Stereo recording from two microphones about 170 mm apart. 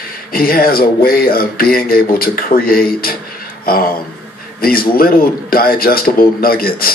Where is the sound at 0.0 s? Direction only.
60° left (ahead or behind).